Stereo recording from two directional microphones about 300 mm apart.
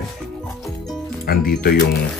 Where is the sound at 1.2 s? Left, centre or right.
Left.